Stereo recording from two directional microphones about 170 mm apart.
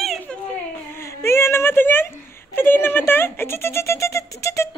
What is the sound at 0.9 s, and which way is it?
Speech, 15° left (ahead or behind).